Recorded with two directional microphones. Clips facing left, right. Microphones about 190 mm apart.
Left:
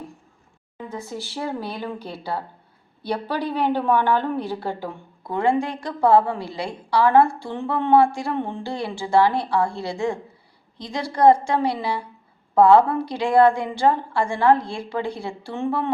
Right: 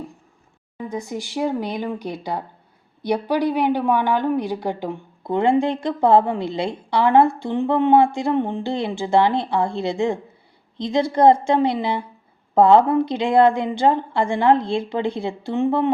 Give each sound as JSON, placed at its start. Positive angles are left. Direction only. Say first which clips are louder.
{"t": 0.8, "sound": "speech", "louder": "right 4 dB", "side_deg": -15}